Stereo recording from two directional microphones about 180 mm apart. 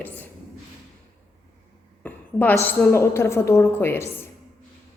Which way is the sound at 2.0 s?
10° left (ahead or behind).